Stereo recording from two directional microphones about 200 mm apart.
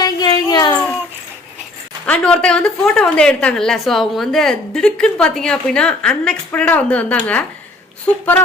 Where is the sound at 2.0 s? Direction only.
5° left (ahead or behind).